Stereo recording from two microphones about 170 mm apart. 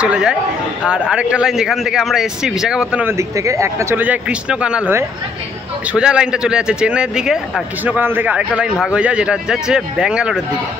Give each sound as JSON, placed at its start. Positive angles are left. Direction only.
{"t": 0.0, "sound": "a man's voice", "side_deg": -5}